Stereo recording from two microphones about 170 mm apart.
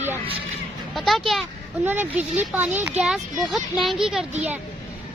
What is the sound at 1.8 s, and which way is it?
Speech, 10° right (ahead or behind).